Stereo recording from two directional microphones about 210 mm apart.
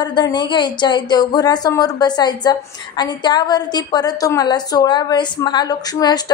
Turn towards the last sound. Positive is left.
turn(degrees=20)  # may be behind; listen again after turning